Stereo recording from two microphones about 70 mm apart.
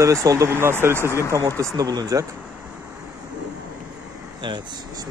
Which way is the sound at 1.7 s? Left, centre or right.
Right.